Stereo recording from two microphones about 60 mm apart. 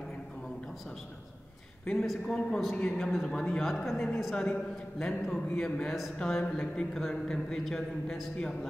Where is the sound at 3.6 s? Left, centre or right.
Centre.